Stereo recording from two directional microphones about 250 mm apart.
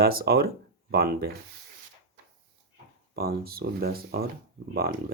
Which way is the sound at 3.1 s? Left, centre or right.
Right.